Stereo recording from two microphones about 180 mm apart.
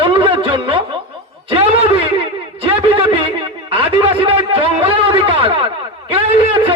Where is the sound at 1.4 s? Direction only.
30° right (ahead or behind).